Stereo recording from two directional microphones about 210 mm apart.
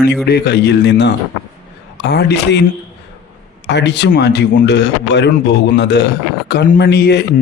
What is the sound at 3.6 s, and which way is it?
Speech, 55° left (ahead or behind).